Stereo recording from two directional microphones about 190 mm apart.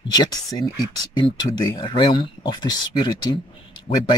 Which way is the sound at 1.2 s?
25° left (ahead or behind).